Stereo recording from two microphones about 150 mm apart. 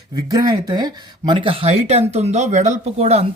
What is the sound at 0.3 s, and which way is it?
Speech, 25° right (ahead or behind).